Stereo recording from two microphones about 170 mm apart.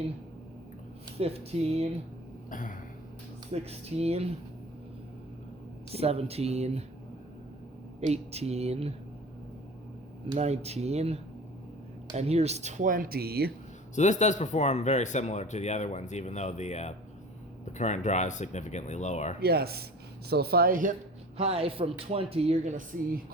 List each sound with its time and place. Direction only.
1.2 s speech: 35° right (ahead or behind)
2.5 s a sound: 50° left (ahead or behind)
3.5 s speech: 40° right (ahead or behind)
5.9 s speech: 35° right (ahead or behind)
8.0 s speech: 40° right (ahead or behind)
10.3 s speech: 40° right (ahead or behind); by 13.5 s 65° right (ahead or behind)
13.9 s speech: 45° left (ahead or behind)
19.4 s speech: 65° right (ahead or behind)
21.3 s speech: 35° right (ahead or behind)